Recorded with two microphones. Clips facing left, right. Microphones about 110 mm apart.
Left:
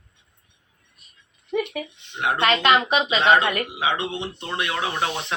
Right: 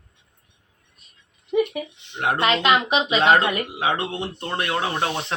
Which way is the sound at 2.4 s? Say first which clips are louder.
Left 1 dB; 10° right (ahead or behind).